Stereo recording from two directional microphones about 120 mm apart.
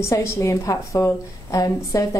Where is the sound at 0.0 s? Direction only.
25° left (ahead or behind).